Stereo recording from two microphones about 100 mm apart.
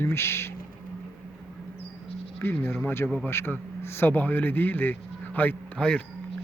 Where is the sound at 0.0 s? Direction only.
25° left (ahead or behind).